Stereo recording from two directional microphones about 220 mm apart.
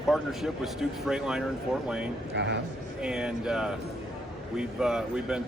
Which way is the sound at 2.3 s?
50° right (ahead or behind).